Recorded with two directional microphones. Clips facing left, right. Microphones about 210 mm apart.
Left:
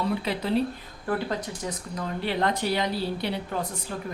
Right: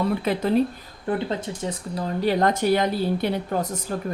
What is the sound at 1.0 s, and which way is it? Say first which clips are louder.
Speech: right 3 dB; 25° right (ahead or behind).